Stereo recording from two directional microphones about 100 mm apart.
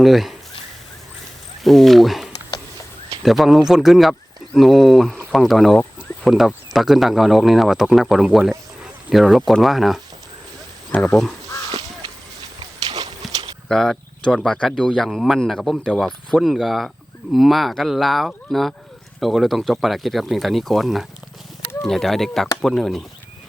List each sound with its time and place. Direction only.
0.0 s speech: centre (ahead or behind)
1.6 s speech: centre (ahead or behind)
10.9 s speech: 20° left (ahead or behind)
13.2 s horse: centre (ahead or behind)
13.7 s speech: 5° left (ahead or behind)